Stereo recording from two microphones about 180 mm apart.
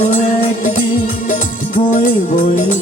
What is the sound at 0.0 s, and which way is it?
Music, 45° left (ahead or behind).